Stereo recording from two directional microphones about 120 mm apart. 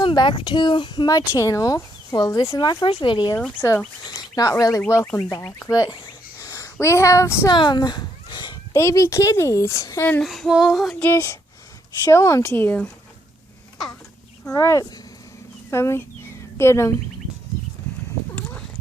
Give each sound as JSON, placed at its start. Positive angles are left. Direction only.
{"t": 0.0, "sound": "speech", "side_deg": 40}
{"t": 3.3, "sound": "speech", "side_deg": 15}
{"t": 4.0, "sound": "bird", "side_deg": 35}
{"t": 5.1, "sound": "a woman's voice", "side_deg": 30}
{"t": 7.5, "sound": "a sound", "side_deg": 40}
{"t": 8.7, "sound": "a woman's voice", "side_deg": 25}
{"t": 10.2, "sound": "female singing", "side_deg": 0}
{"t": 11.0, "sound": "a woman's voice", "side_deg": 20}
{"t": 12.5, "sound": "speech", "side_deg": 15}
{"t": 14.5, "sound": "a woman's voice", "side_deg": 25}
{"t": 15.7, "sound": "a sound", "side_deg": 20}